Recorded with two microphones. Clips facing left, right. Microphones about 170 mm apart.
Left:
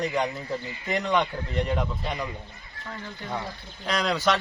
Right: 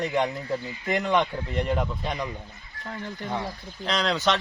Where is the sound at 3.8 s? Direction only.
5° left (ahead or behind).